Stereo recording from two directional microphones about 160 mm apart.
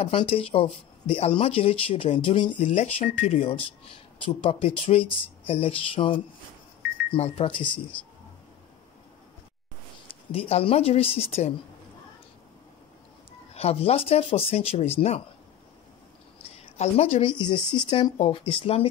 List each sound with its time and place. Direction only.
0.0 s speech: 35° left (ahead or behind)
10.3 s speech: 35° left (ahead or behind)
13.5 s speech: 40° left (ahead or behind)
16.7 s speech: 40° left (ahead or behind)